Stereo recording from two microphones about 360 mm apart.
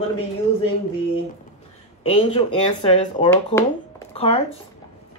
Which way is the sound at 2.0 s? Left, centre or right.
Centre.